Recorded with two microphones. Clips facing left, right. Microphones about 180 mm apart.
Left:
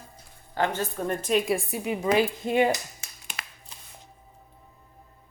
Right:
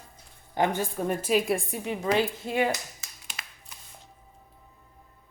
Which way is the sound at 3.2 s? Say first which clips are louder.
Left 3 dB; 55° left (ahead or behind).